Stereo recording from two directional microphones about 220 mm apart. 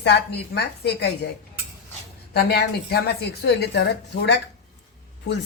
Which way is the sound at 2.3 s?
45° left (ahead or behind).